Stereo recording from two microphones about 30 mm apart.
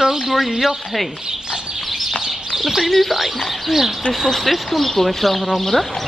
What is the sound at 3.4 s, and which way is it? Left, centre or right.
Speech, centre.